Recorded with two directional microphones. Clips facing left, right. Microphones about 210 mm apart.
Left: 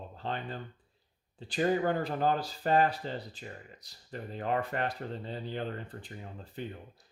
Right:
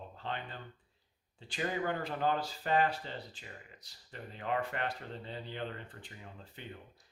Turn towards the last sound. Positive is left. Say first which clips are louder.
# left 8 dB
turn(degrees=40)  # may be behind; listen again after turning